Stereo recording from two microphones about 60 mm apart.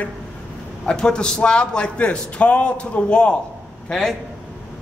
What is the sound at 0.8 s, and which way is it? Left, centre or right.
A man's voice, centre.